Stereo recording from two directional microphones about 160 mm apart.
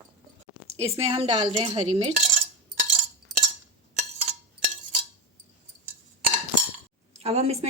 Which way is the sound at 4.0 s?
40° right (ahead or behind).